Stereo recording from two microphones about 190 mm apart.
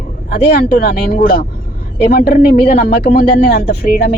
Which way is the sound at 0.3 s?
55° left (ahead or behind).